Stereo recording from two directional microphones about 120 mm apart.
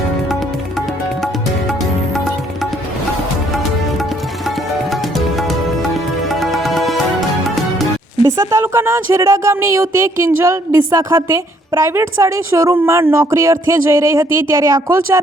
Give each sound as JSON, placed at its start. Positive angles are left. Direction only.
{"t": 4.4, "sound": "music", "side_deg": 0}
{"t": 8.2, "sound": "a woman's voice", "side_deg": -25}